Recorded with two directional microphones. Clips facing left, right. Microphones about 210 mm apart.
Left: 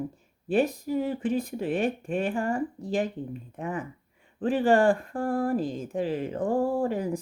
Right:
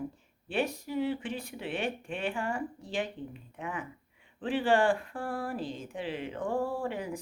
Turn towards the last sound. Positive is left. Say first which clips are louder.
# left 7 dB
turn(degrees=40)  # may be behind; listen again after turning